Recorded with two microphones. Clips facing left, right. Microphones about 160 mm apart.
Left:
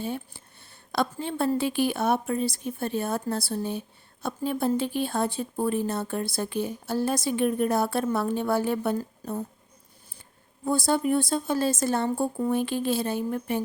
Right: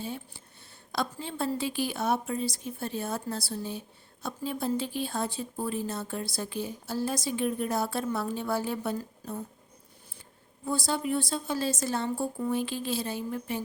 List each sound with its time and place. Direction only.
0.0 s a woman's voice: 60° left (ahead or behind)
10.7 s a woman's voice: 50° left (ahead or behind)